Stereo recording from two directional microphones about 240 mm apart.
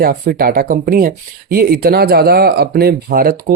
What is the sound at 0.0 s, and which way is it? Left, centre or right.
Speech, right.